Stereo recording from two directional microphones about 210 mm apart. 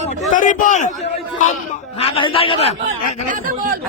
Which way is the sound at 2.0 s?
25° left (ahead or behind).